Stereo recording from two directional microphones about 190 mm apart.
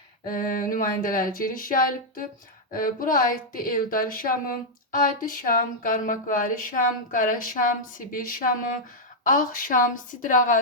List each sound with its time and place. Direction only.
0.3 s speech: 45° left (ahead or behind)